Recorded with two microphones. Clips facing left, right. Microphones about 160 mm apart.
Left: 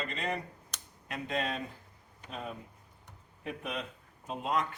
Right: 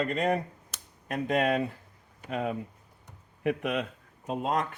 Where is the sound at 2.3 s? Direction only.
75° right (ahead or behind).